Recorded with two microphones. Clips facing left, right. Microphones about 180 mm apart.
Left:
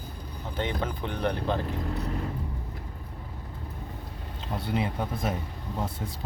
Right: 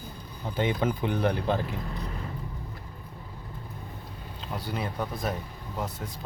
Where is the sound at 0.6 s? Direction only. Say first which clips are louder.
Right 4 dB; 10° right (ahead or behind).